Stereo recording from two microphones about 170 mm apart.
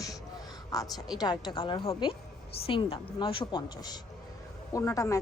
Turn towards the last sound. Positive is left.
turn(degrees=20)  # may be behind; listen again after turning